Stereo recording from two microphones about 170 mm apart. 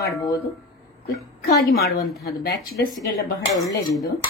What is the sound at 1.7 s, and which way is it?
Speech, 65° left (ahead or behind).